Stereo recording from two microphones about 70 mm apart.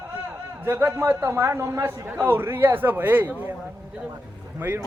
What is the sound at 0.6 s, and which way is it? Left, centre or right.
A man's voice, right.